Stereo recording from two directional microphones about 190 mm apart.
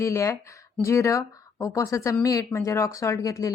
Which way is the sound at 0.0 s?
15° left (ahead or behind).